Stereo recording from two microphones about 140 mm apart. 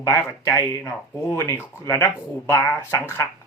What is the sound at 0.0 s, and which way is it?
Speech, 25° left (ahead or behind).